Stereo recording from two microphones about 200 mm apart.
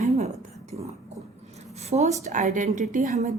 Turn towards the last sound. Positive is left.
turn(degrees=-35)  # may be behind; listen again after turning